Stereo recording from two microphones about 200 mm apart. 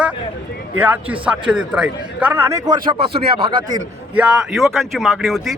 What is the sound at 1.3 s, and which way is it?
A man's voice, 5° right (ahead or behind).